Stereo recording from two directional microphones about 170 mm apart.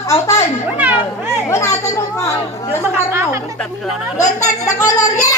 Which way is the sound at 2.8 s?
15° right (ahead or behind).